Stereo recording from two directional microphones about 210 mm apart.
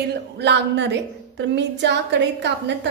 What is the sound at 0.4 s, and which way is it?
A woman's voice, 55° right (ahead or behind).